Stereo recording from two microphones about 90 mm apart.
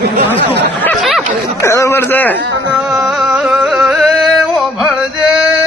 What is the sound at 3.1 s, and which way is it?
Music, 5° right (ahead or behind).